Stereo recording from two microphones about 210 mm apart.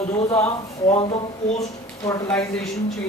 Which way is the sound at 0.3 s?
15° left (ahead or behind).